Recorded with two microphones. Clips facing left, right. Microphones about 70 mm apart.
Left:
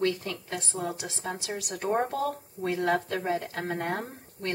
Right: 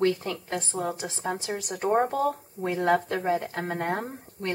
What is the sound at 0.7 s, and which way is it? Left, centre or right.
Speech, right.